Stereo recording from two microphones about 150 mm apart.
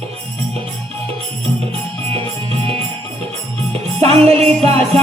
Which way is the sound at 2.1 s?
40° right (ahead or behind).